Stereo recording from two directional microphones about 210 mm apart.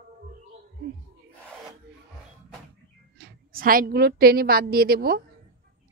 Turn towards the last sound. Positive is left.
turn(degrees=-45)  # may be behind; listen again after turning